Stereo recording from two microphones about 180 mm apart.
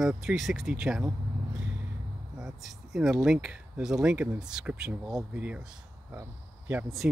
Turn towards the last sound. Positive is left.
turn(degrees=0)  # may be behind; listen again after turning